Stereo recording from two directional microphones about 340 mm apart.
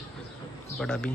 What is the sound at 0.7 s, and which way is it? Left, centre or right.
Speech, centre.